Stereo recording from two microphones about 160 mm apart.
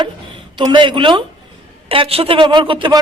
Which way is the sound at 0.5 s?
30° right (ahead or behind).